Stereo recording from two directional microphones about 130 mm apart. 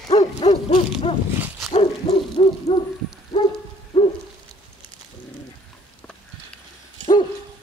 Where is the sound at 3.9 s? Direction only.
50° left (ahead or behind).